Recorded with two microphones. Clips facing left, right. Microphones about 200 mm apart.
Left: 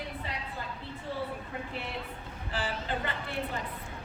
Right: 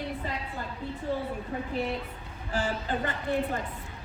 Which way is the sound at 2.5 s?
45° right (ahead or behind).